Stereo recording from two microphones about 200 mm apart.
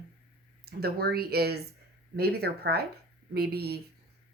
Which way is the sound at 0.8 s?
50° right (ahead or behind).